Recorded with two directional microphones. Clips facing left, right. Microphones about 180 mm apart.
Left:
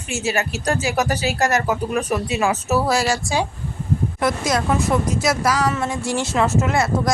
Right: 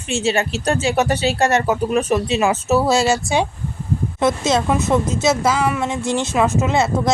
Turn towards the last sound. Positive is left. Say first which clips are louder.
# right 2 dB
turn(degrees=-20)  # may be behind; listen again after turning